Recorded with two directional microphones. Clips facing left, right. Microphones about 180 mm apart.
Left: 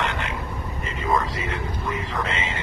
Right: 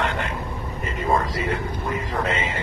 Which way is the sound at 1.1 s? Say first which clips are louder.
Right 2 dB; 40° right (ahead or behind).